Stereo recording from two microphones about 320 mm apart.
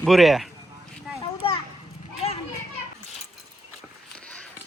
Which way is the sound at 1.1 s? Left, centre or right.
Centre.